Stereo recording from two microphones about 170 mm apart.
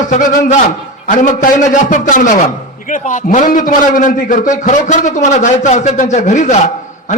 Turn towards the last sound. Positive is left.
turn(degrees=45)  # may be behind; listen again after turning